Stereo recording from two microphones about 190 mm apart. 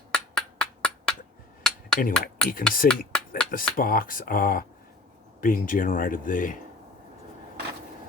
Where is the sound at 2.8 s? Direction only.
50° left (ahead or behind).